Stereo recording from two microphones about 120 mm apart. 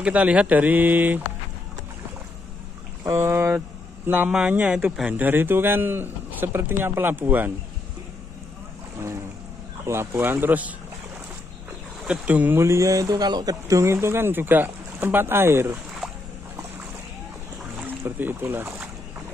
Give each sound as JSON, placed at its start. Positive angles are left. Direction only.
{"t": 0.0, "sound": "a man's voice", "side_deg": -10}
{"t": 3.0, "sound": "speech", "side_deg": -25}
{"t": 4.3, "sound": "a man's voice", "side_deg": -10}
{"t": 9.8, "sound": "a man's voice", "side_deg": -20}
{"t": 12.1, "sound": "speech", "side_deg": -10}
{"t": 17.7, "sound": "speech", "side_deg": -15}